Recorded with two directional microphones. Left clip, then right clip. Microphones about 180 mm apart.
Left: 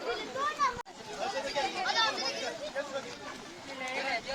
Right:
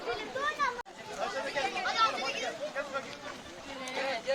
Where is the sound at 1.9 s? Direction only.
10° right (ahead or behind).